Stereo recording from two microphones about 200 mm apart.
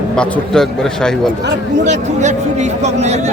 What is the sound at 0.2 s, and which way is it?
A man's voice, 5° left (ahead or behind).